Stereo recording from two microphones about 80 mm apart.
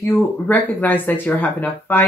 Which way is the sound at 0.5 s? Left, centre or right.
Left.